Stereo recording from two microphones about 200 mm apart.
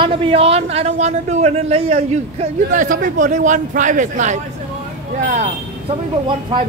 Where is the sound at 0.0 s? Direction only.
25° right (ahead or behind).